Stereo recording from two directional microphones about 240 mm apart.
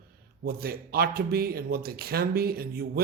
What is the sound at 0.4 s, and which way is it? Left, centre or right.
Speech, right.